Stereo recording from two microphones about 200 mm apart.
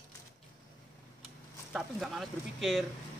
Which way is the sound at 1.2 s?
Centre (ahead or behind).